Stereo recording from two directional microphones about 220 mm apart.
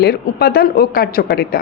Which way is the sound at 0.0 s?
45° left (ahead or behind).